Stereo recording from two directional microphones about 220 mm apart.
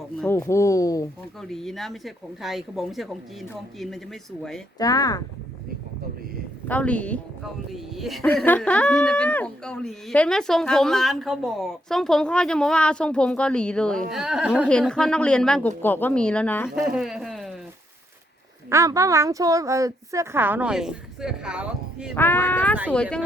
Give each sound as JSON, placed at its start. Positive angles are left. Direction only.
{"t": 0.2, "sound": "speech", "side_deg": 10}
{"t": 1.4, "sound": "a woman's voice", "side_deg": 0}
{"t": 4.8, "sound": "speech", "side_deg": 15}
{"t": 6.7, "sound": "a woman's voice", "side_deg": 5}
{"t": 18.7, "sound": "a woman's voice", "side_deg": -15}
{"t": 22.1, "sound": "a woman's voice", "side_deg": 10}